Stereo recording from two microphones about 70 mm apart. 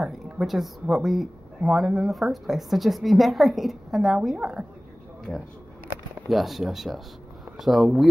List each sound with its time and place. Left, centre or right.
0.0 s speech: centre
6.2 s speech: centre